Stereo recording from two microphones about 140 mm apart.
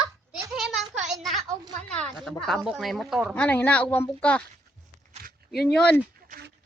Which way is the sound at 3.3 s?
10° left (ahead or behind).